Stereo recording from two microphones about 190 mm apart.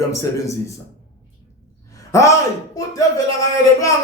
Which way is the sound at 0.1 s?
15° left (ahead or behind).